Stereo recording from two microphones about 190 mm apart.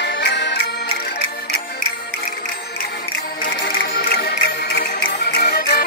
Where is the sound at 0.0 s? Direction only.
65° left (ahead or behind).